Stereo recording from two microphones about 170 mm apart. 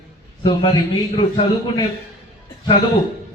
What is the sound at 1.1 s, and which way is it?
Speech, 30° left (ahead or behind).